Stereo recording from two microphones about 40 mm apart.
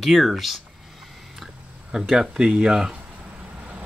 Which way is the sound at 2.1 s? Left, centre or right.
Centre.